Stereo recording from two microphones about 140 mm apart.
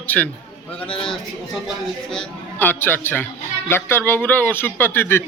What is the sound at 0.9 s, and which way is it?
Speech, 5° left (ahead or behind).